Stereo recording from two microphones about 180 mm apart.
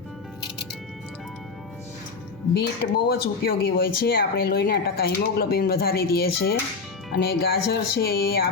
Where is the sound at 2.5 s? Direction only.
65° left (ahead or behind).